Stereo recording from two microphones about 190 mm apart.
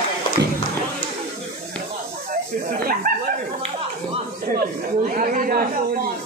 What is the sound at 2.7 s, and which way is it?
Speech, 50° right (ahead or behind).